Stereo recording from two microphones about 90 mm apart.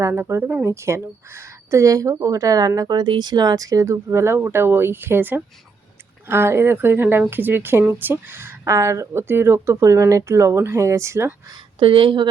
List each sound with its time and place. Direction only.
0.0 s speech: 25° right (ahead or behind)
11.8 s speech: 70° right (ahead or behind)